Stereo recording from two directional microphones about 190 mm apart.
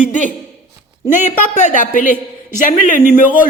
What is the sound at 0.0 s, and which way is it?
A woman's voice, 40° left (ahead or behind).